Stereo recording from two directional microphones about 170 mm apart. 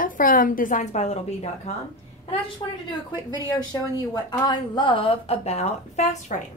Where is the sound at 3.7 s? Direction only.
20° left (ahead or behind); by 6.3 s 45° left (ahead or behind).